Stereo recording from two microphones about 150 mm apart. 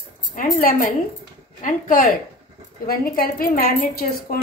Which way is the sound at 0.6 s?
65° left (ahead or behind).